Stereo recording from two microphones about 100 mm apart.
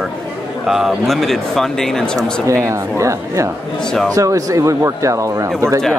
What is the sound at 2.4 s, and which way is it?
Speech, 30° right (ahead or behind).